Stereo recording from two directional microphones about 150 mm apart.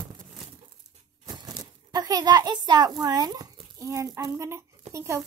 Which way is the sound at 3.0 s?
25° right (ahead or behind).